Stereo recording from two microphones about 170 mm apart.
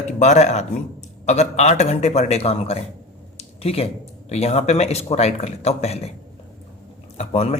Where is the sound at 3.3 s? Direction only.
35° left (ahead or behind).